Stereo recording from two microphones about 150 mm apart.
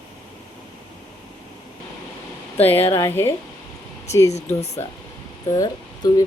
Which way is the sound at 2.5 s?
15° left (ahead or behind).